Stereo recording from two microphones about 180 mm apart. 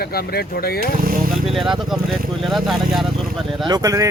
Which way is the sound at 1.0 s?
50° right (ahead or behind).